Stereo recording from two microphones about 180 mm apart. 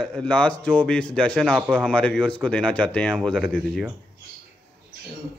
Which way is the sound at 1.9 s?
5° left (ahead or behind).